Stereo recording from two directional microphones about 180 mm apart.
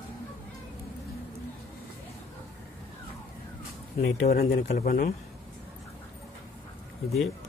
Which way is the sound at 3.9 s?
65° left (ahead or behind).